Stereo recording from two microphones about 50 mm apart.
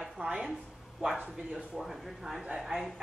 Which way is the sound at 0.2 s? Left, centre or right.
Centre.